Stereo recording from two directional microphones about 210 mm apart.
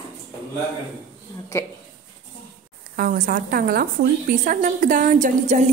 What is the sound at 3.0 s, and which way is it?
A woman's voice, 40° right (ahead or behind).